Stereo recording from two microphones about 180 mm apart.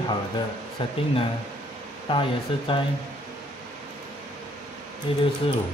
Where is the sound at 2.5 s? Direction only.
30° left (ahead or behind).